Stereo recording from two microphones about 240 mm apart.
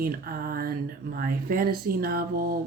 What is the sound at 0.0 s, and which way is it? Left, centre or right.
Speech, right.